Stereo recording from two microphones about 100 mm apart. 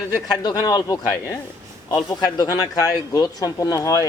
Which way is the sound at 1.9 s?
45° left (ahead or behind).